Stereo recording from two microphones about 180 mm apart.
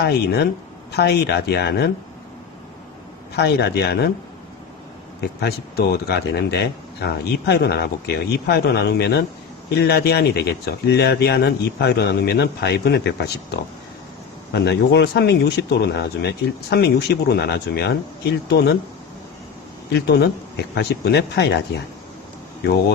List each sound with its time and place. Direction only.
0.9 s speech: 65° left (ahead or behind)
3.3 s speech: 65° left (ahead or behind)
5.4 s speech: 65° left (ahead or behind)
19.9 s speech: 65° left (ahead or behind)